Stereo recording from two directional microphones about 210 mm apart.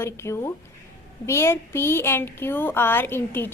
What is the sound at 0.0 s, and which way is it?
Speech, 10° left (ahead or behind).